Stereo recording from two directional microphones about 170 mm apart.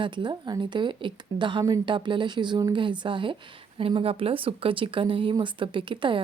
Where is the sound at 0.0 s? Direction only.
30° right (ahead or behind).